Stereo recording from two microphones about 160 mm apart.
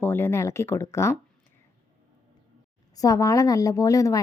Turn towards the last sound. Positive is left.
turn(degrees=20)  # may be behind; listen again after turning